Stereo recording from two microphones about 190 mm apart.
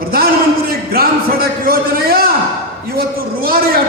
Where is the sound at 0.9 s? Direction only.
50° right (ahead or behind).